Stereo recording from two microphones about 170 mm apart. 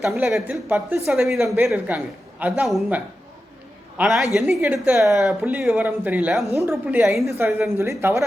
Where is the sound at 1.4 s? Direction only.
15° right (ahead or behind).